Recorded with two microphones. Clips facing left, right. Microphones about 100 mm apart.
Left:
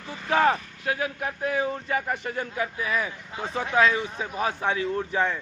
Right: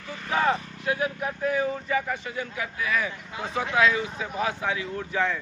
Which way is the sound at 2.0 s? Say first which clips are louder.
Left 1 dB; 50° left (ahead or behind).